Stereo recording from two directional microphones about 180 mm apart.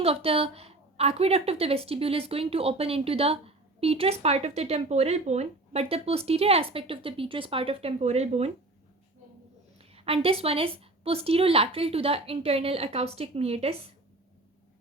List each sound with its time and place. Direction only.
0.0 s a woman's voice: 35° right (ahead or behind)
9.9 s a woman's voice: 35° right (ahead or behind)